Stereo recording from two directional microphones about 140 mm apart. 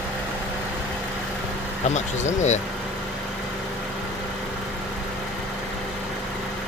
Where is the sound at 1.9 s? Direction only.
55° left (ahead or behind).